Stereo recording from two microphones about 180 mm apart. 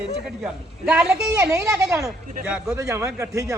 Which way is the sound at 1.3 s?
20° right (ahead or behind).